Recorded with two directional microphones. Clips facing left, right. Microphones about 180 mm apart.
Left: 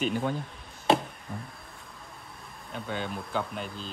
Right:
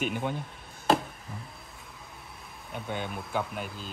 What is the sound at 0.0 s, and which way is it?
Speech, 10° right (ahead or behind).